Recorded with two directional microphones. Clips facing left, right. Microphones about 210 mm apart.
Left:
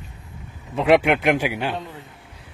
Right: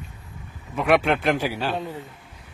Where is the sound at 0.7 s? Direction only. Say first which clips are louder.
Left 3 dB; 25° left (ahead or behind).